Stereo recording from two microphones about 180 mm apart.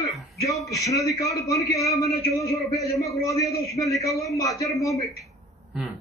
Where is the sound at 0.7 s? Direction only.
20° left (ahead or behind).